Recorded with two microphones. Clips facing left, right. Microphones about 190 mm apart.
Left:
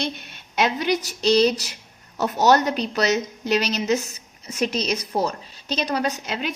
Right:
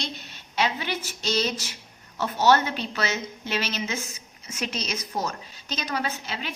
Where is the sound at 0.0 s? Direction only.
60° left (ahead or behind).